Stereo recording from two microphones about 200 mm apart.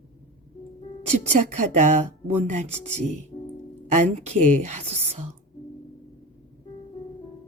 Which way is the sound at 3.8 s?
35° right (ahead or behind).